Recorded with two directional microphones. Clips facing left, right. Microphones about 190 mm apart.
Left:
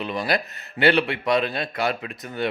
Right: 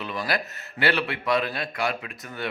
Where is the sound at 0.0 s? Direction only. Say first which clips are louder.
Left 4 dB; 20° left (ahead or behind).